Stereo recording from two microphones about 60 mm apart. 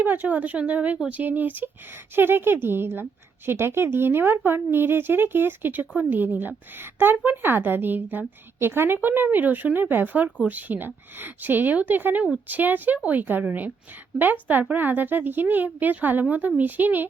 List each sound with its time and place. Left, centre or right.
0.0 s a woman's voice: right